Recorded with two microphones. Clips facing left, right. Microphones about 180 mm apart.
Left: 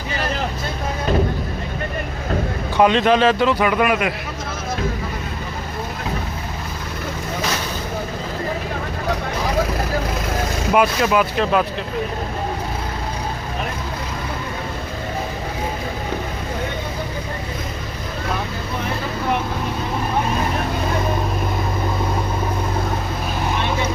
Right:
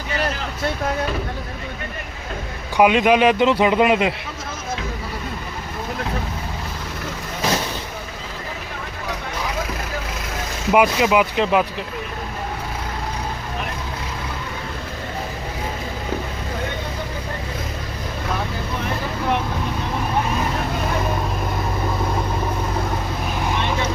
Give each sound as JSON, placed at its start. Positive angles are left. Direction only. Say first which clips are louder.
{"t": 2.7, "sound": "a man's voice", "louder": "even", "side_deg": -10}
{"t": 10.8, "sound": "speech", "louder": "right 1 dB", "side_deg": -15}